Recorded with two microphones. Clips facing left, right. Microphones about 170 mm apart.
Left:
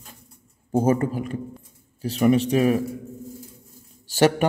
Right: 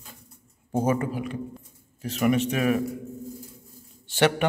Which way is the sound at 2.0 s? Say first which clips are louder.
Left 4 dB; 30° left (ahead or behind).